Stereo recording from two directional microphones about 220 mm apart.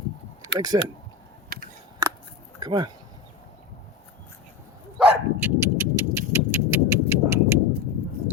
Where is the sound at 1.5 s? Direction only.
45° right (ahead or behind).